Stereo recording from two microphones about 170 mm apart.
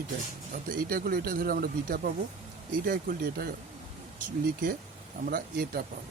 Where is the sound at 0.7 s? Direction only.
55° right (ahead or behind).